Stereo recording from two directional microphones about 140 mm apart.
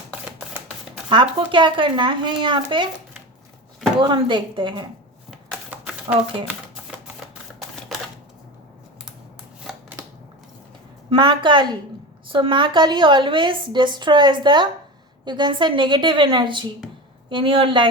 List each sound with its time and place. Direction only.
1.1 s a woman's voice: 40° right (ahead or behind)
4.0 s a woman's voice: 35° right (ahead or behind)
5.7 s a sound: 10° right (ahead or behind)
7.9 s camera: centre (ahead or behind)
11.1 s a woman's voice: 35° right (ahead or behind)